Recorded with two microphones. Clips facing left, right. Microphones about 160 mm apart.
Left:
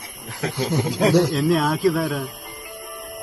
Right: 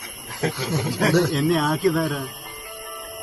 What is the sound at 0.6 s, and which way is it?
Speech, 15° left (ahead or behind).